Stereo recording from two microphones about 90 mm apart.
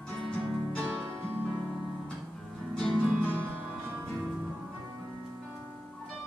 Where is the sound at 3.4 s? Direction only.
20° right (ahead or behind).